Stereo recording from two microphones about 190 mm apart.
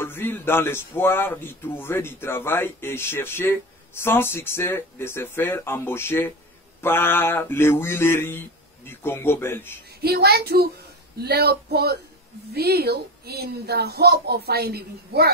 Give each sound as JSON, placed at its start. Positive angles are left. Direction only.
{"t": 0.0, "sound": "speech", "side_deg": 10}
{"t": 10.0, "sound": "speech", "side_deg": -55}